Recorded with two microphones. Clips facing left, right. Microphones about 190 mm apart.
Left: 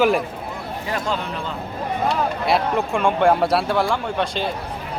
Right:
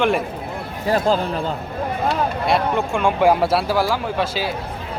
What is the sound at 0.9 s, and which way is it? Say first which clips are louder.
Speech: right 8 dB; 35° right (ahead or behind).